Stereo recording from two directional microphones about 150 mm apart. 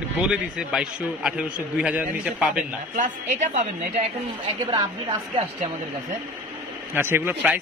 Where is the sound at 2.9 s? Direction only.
55° right (ahead or behind).